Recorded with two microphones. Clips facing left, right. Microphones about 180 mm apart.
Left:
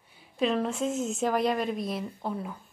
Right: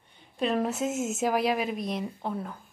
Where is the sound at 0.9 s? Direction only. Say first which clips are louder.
Even; 45° right (ahead or behind).